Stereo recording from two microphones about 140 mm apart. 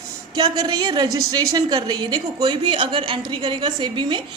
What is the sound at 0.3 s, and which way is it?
A woman's voice, 30° right (ahead or behind).